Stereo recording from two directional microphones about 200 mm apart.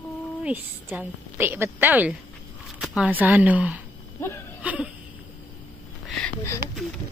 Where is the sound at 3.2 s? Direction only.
10° right (ahead or behind).